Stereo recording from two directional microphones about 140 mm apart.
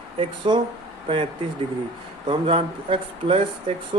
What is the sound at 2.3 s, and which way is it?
Speech, 40° right (ahead or behind).